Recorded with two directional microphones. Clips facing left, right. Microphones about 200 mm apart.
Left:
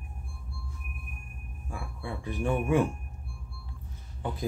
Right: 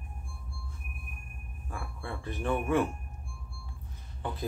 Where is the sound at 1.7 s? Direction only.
10° left (ahead or behind).